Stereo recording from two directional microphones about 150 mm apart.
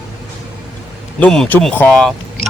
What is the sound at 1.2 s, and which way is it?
Speech, 5° left (ahead or behind).